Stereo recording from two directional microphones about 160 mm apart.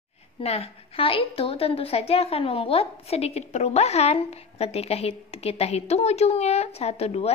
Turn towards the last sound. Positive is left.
turn(degrees=40)  # may be behind; listen again after turning